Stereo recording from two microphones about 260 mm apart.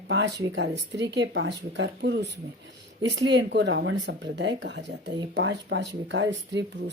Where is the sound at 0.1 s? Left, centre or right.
Right.